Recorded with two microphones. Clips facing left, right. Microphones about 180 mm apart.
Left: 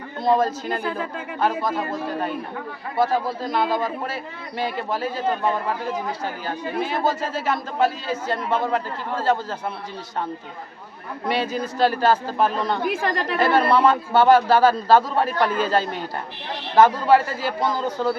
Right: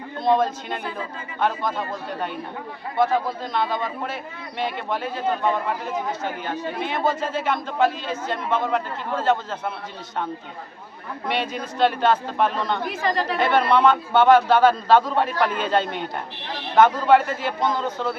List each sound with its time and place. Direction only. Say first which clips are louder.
0.3 s a man's voice: left 1 dB; 5° left (ahead or behind)
3.0 s a man's voice: even; 5° left (ahead or behind)
6.7 s a man's voice: left 2 dB; 5° left (ahead or behind)
11.3 s a man's voice: left 3 dB; 5° left (ahead or behind)
12.9 s speech: even; 55° left (ahead or behind)
13.3 s a man's voice: left 2 dB; 5° left (ahead or behind)